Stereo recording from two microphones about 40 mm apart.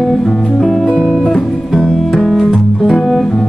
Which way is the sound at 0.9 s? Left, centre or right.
Left.